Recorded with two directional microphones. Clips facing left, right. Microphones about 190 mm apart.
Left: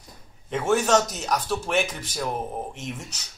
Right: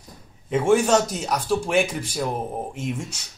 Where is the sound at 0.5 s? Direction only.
10° right (ahead or behind).